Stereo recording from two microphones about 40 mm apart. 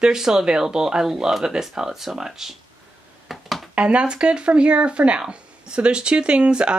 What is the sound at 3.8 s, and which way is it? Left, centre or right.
Speech, right.